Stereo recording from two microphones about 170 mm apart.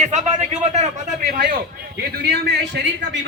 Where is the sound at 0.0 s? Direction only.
45° right (ahead or behind).